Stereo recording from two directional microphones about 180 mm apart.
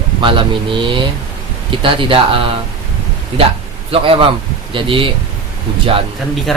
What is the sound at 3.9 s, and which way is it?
A man's voice, 30° right (ahead or behind).